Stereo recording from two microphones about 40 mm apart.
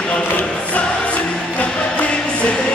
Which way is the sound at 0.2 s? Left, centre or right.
Left.